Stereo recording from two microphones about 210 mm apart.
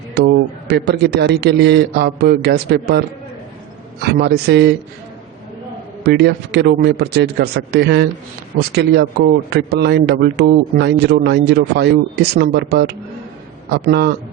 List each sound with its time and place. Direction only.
0.2 s a man's voice: 50° right (ahead or behind)
4.0 s speech: 55° right (ahead or behind)
6.0 s speech: 55° right (ahead or behind)